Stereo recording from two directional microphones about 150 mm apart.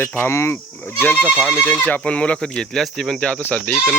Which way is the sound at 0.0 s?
15° left (ahead or behind).